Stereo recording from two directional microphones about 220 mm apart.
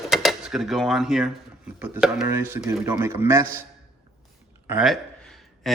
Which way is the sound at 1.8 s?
5° right (ahead or behind).